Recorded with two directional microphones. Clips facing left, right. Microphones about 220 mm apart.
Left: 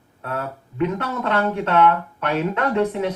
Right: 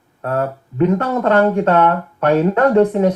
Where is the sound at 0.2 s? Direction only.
40° right (ahead or behind).